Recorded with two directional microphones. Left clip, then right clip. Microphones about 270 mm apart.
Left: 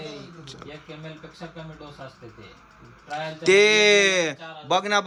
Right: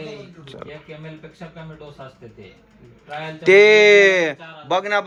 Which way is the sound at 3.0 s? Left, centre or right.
Centre.